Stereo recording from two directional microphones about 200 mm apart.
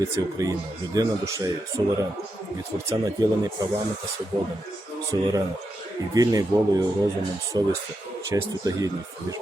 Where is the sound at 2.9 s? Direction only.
20° right (ahead or behind).